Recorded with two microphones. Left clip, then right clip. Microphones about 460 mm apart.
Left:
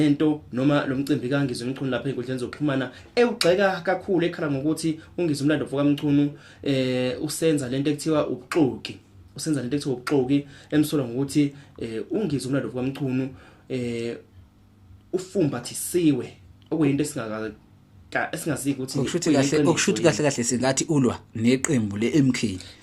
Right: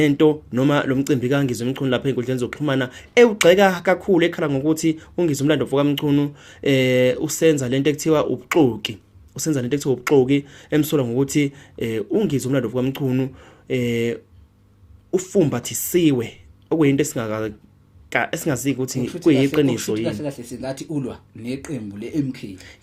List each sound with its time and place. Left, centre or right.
0.0 s speech: right
19.7 s speech: left